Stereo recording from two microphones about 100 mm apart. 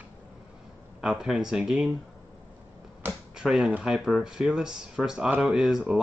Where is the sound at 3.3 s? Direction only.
5° right (ahead or behind).